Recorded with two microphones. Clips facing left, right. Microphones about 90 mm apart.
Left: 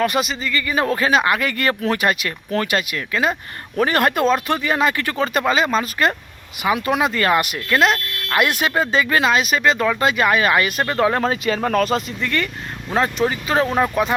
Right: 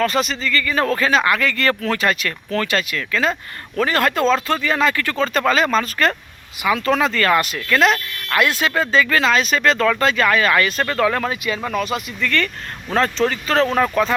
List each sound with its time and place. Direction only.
0.0 s speech: 15° left (ahead or behind)
7.8 s speech: centre (ahead or behind)
8.3 s speech: 15° left (ahead or behind); by 12.1 s 35° left (ahead or behind)
12.2 s speech: 15° left (ahead or behind)